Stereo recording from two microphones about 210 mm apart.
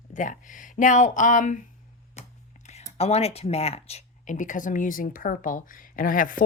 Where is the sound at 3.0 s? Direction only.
30° left (ahead or behind).